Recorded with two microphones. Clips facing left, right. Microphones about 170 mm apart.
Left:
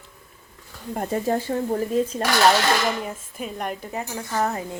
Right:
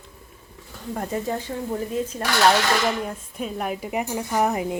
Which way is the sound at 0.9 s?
25° left (ahead or behind).